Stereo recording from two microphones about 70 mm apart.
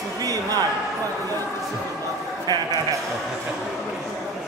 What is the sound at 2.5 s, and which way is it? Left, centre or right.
Speech, right.